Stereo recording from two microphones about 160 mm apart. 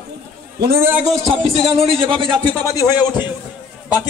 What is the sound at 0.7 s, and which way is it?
Speech, 10° right (ahead or behind).